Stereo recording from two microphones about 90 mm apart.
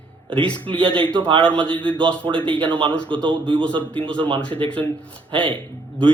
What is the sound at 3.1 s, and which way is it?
Speech, 65° right (ahead or behind).